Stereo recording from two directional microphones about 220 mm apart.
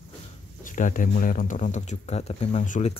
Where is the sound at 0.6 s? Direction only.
35° left (ahead or behind).